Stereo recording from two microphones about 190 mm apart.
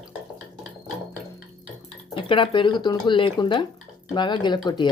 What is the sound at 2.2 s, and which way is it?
Speech, 25° left (ahead or behind).